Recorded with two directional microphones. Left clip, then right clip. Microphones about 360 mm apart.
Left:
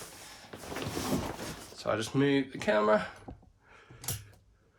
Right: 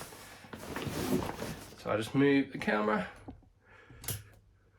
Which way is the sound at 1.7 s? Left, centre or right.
Centre.